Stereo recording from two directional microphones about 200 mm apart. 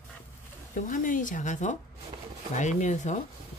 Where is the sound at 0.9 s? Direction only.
40° left (ahead or behind).